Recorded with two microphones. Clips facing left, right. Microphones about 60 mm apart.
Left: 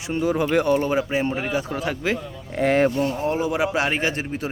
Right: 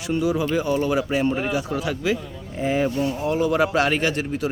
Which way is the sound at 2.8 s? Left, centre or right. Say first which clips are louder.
Left 2 dB; left.